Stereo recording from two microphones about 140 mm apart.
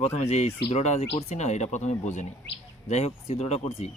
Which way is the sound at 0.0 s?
50° left (ahead or behind).